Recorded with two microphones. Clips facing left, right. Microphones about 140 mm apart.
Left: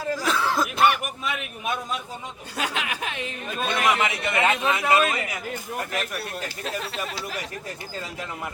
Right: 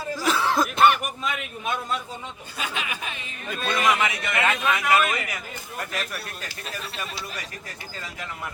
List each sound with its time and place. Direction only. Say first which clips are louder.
0.3 s cough: right 3 dB; centre (ahead or behind)
2.6 s speech: left 3 dB; 70° left (ahead or behind)
3.5 s a man's voice: even; 20° left (ahead or behind)